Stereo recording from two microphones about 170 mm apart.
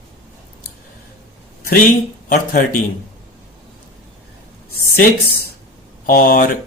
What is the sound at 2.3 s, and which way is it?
Speech, 55° left (ahead or behind).